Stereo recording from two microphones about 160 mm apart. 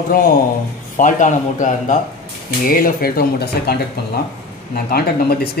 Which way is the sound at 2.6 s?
60° left (ahead or behind).